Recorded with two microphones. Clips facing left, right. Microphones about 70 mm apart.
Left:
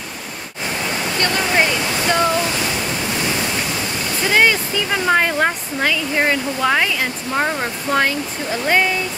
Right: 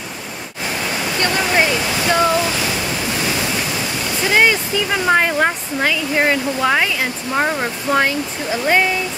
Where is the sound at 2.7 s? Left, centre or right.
Centre.